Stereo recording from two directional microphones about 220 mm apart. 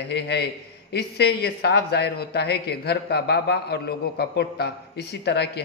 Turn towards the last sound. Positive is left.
turn(degrees=50)  # may be behind; listen again after turning